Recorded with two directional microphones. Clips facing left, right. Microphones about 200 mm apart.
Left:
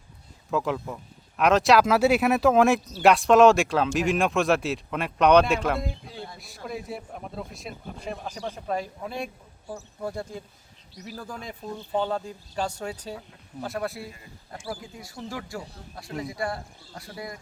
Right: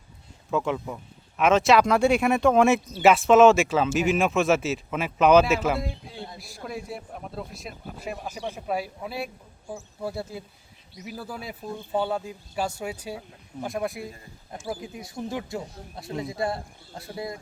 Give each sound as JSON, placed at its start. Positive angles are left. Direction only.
{"t": 0.5, "sound": "speech", "side_deg": 0}